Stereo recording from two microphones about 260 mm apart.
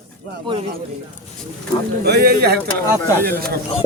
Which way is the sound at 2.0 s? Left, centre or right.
Right.